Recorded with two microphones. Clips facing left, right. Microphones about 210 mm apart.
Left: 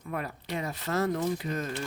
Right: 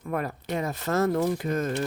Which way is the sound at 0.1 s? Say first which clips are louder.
Right 5 dB; 50° right (ahead or behind).